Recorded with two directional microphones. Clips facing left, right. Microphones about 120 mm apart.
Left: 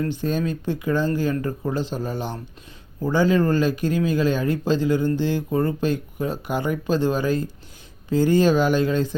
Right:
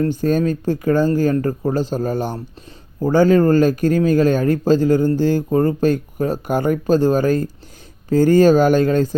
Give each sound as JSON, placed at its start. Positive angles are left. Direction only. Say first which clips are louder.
{"t": 0.0, "sound": "speech", "louder": "right 7 dB", "side_deg": -45}